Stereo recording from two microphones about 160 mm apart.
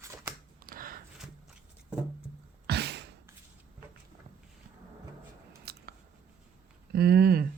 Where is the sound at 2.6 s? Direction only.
90° right.